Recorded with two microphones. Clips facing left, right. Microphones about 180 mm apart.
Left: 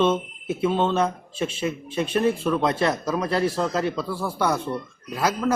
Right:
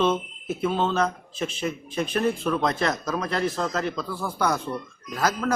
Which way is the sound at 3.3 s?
35° left (ahead or behind).